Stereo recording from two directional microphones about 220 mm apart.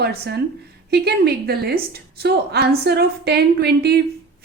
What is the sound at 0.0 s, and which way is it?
A woman's voice, 45° right (ahead or behind).